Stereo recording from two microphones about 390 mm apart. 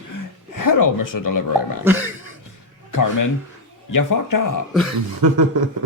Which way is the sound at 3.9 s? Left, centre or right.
Left.